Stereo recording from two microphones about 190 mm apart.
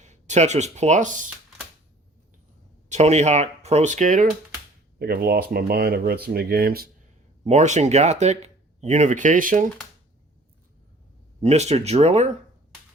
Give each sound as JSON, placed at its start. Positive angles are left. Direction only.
{"t": 0.0, "sound": "speech", "side_deg": -40}
{"t": 2.9, "sound": "speech", "side_deg": -35}
{"t": 4.9, "sound": "speech", "side_deg": -55}
{"t": 7.4, "sound": "speech", "side_deg": -40}
{"t": 11.4, "sound": "speech", "side_deg": -35}